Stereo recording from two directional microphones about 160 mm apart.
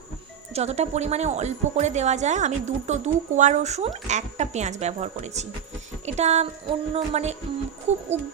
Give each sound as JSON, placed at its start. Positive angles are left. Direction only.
{"t": 0.5, "sound": "speech", "side_deg": -40}